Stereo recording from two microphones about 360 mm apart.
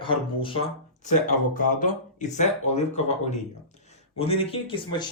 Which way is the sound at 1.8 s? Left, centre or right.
Centre.